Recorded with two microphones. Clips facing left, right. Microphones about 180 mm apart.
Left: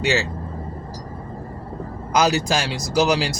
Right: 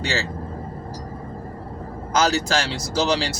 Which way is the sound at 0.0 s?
15° left (ahead or behind).